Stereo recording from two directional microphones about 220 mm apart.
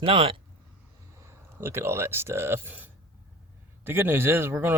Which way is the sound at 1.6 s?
10° right (ahead or behind).